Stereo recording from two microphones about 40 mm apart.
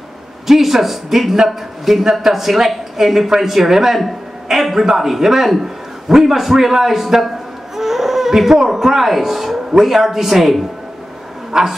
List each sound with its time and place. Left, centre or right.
0.5 s a man's voice: centre
11.5 s a man's voice: centre